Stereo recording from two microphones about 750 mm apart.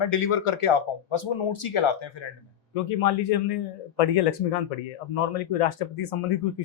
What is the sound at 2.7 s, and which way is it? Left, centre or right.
Speech, left.